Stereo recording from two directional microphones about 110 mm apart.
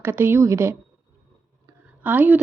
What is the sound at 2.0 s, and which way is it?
Speech, 15° right (ahead or behind).